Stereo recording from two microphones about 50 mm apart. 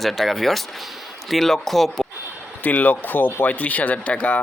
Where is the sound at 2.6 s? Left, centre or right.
Left.